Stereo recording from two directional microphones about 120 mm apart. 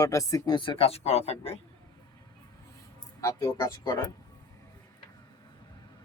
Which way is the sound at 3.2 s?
30° left (ahead or behind).